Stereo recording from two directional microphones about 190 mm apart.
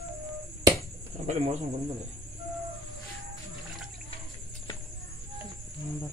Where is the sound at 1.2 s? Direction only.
35° right (ahead or behind).